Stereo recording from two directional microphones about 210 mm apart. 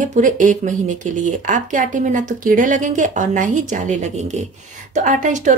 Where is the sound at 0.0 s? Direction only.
40° right (ahead or behind).